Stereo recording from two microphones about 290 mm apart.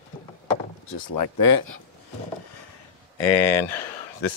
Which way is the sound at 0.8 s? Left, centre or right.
Left.